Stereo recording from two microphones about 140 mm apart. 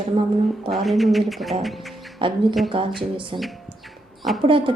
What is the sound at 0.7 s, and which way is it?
Speech, centre (ahead or behind).